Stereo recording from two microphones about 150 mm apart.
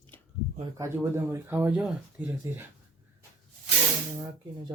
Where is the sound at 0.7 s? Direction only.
20° right (ahead or behind).